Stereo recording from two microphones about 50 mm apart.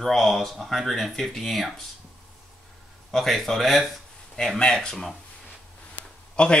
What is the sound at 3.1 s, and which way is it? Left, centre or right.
Speech, centre.